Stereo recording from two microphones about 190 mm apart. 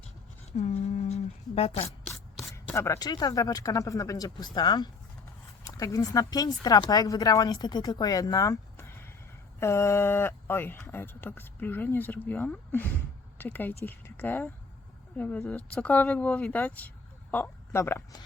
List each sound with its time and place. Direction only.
0.5 s speech: 35° left (ahead or behind)
2.4 s speech: 15° left (ahead or behind)